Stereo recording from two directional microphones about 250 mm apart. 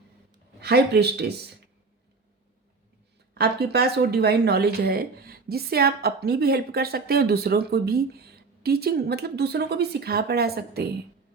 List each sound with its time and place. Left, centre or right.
0.6 s speech: right
3.3 s speech: right